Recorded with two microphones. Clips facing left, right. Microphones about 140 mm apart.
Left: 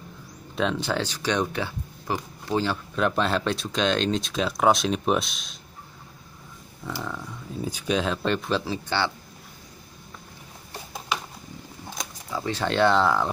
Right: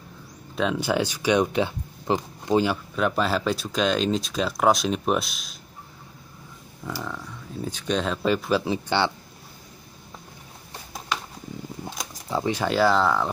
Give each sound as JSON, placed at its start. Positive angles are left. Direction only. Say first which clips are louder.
{"t": 0.6, "sound": "speech", "louder": "right 2 dB", "side_deg": -5}
{"t": 3.0, "sound": "speech", "louder": "even", "side_deg": -5}
{"t": 6.8, "sound": "speech", "louder": "right 1 dB", "side_deg": -15}
{"t": 7.2, "sound": "speech", "louder": "left 1 dB", "side_deg": 10}
{"t": 12.4, "sound": "speech", "louder": "even", "side_deg": -10}